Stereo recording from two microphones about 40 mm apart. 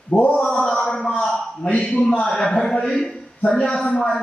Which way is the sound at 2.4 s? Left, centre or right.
Left.